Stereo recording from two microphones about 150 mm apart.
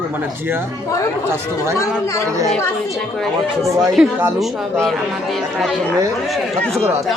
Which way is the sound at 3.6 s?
20° right (ahead or behind).